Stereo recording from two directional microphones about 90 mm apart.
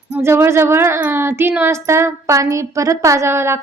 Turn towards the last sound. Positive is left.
turn(degrees=-30)  # may be behind; listen again after turning